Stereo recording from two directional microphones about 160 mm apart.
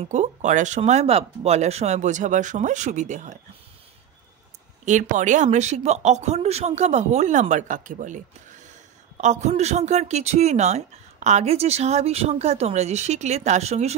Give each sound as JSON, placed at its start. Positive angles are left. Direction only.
{"t": 0.0, "sound": "speech", "side_deg": -45}
{"t": 4.8, "sound": "speech", "side_deg": -50}
{"t": 9.2, "sound": "speech", "side_deg": -45}